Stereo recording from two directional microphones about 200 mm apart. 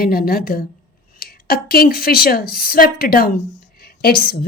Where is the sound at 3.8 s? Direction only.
50° left (ahead or behind).